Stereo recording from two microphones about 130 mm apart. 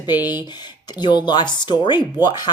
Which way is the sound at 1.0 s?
35° left (ahead or behind).